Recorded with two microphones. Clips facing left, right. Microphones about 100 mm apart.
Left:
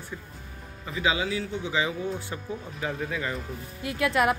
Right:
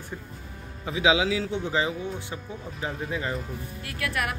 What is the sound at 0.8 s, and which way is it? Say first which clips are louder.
Speech: right 4 dB; 85° right.